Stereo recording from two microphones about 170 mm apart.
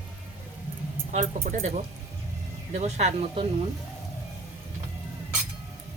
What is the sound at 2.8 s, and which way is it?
Speech, 40° right (ahead or behind).